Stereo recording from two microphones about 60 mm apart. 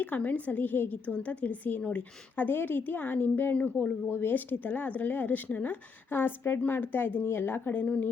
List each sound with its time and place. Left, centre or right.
0.0 s speech: left